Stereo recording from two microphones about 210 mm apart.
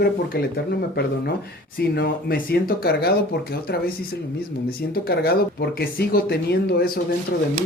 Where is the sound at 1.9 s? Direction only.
45° left (ahead or behind).